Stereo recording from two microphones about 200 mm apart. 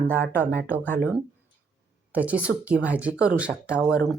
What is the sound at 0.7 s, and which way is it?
Speech, 10° right (ahead or behind).